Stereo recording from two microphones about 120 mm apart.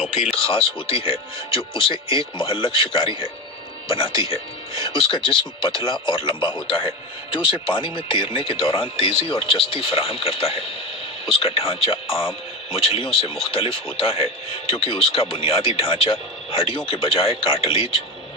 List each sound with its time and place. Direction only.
0.3 s speech: 50° left (ahead or behind)